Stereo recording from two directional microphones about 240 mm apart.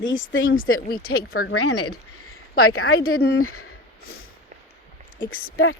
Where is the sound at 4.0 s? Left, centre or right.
Left.